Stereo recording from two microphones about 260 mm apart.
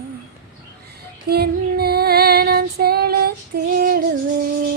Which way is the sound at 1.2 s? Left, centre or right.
Right.